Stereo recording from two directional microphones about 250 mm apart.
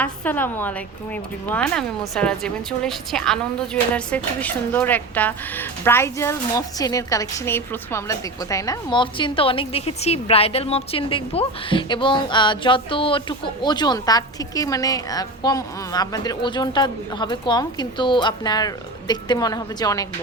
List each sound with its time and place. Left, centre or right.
0.0 s speech: centre